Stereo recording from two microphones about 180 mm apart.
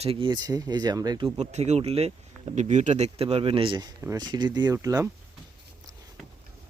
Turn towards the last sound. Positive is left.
turn(degrees=-20)  # may be behind; listen again after turning